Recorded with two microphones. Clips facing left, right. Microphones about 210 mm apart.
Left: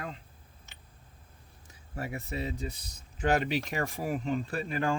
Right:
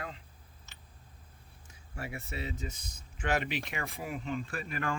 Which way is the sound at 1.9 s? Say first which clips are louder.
Left 4 dB; 40° left (ahead or behind).